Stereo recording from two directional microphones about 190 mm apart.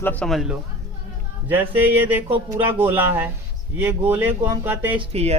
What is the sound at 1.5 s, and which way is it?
Speech, 10° right (ahead or behind).